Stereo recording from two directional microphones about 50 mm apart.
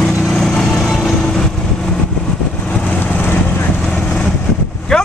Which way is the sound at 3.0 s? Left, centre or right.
Left.